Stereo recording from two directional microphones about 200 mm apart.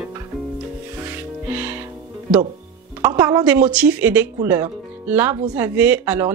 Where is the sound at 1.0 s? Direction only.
10° right (ahead or behind).